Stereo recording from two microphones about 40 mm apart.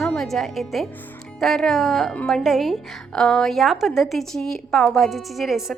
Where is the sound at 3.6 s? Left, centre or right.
Centre.